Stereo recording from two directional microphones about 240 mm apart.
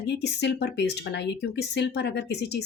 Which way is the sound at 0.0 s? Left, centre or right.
Left.